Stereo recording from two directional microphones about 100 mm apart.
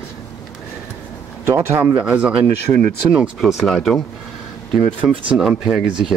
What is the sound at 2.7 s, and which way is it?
Speech, 20° left (ahead or behind).